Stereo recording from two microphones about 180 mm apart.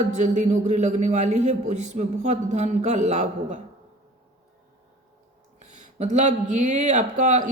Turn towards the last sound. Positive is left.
turn(degrees=-45)  # may be behind; listen again after turning